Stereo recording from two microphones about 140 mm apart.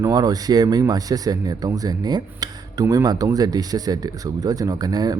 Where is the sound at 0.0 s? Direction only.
30° right (ahead or behind).